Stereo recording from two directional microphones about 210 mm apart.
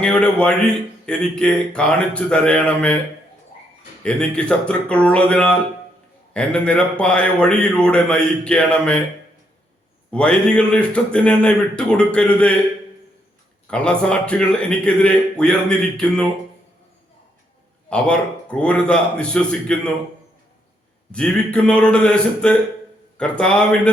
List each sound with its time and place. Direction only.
0.0 s a man's voice: 5° left (ahead or behind)
4.0 s a man's voice: 5° left (ahead or behind)
10.1 s a man's voice: 5° left (ahead or behind)
13.7 s a man's voice: 5° left (ahead or behind)
17.8 s a man's voice: 5° left (ahead or behind)
21.1 s a man's voice: 5° left (ahead or behind)